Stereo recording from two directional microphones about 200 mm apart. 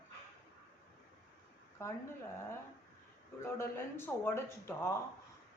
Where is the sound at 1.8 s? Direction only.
15° left (ahead or behind).